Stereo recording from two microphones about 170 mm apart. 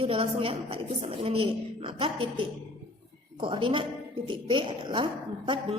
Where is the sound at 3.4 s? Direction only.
30° right (ahead or behind).